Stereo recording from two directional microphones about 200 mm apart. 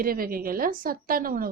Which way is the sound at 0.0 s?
45° right (ahead or behind).